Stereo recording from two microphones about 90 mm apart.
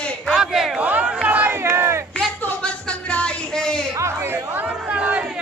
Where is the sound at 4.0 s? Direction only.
25° right (ahead or behind).